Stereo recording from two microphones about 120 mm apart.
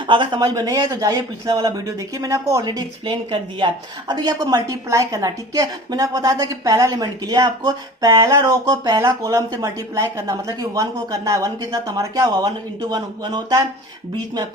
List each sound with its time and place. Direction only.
0.1 s a woman's voice: 40° right (ahead or behind)
3.1 s speech: 45° right (ahead or behind)
4.1 s a woman's voice: 35° right (ahead or behind)